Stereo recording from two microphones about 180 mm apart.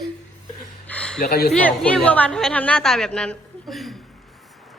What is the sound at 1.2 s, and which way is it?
Speech, 60° left (ahead or behind).